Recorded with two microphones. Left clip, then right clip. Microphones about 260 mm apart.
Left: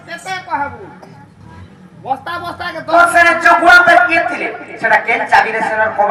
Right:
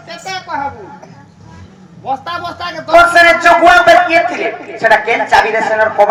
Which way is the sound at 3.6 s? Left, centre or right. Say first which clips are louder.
Even; right.